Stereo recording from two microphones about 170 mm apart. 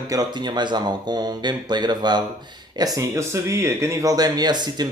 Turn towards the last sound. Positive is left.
turn(degrees=-25)  # may be behind; listen again after turning